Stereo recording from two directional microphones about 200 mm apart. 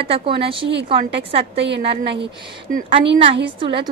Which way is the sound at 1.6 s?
60° right (ahead or behind).